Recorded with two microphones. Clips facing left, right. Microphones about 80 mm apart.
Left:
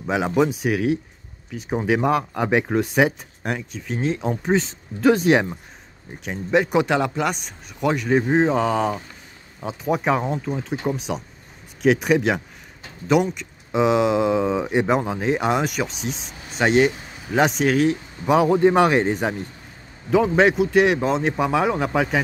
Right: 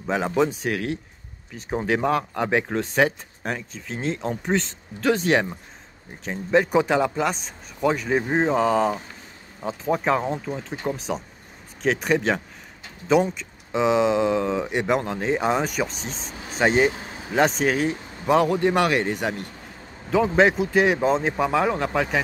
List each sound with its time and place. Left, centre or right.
0.0 s speech: centre
1.5 s speech: centre
6.2 s speech: centre
18.5 s speech: left
20.1 s speech: centre